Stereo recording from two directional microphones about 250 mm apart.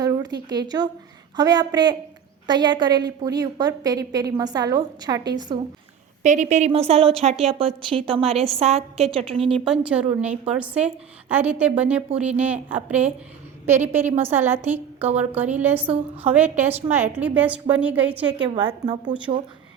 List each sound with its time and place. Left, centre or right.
0.0 s a sound: centre
0.4 s a woman's voice: centre
6.2 s a woman's voice: right
9.9 s a woman's voice: centre
18.4 s a woman's voice: centre